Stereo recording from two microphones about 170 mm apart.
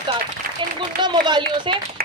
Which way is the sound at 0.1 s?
30° right (ahead or behind).